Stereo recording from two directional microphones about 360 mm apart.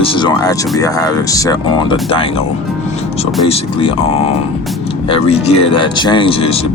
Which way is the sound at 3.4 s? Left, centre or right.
Centre.